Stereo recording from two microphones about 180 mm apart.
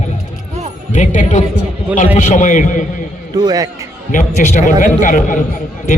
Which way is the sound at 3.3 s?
20° right (ahead or behind).